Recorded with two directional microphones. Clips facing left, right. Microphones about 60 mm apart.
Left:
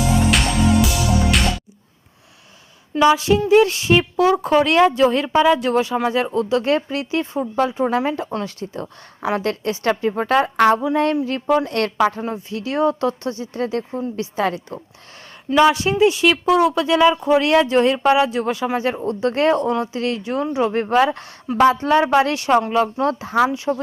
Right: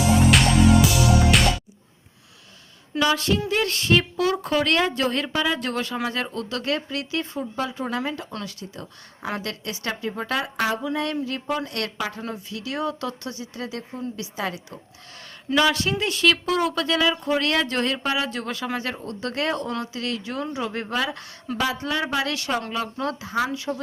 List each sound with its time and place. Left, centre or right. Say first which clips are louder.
0.0 s music: even; centre
3.2 s speech: left 9 dB; centre
5.3 s speech: left 9 dB; left
15.5 s speech: left 7 dB; centre; by 23.5 s left
23.5 s speech: left 7 dB; left